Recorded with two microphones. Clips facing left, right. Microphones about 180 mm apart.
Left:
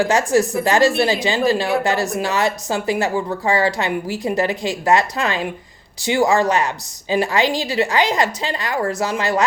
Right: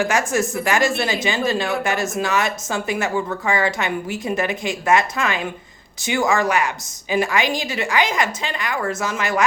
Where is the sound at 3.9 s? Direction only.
20° right (ahead or behind).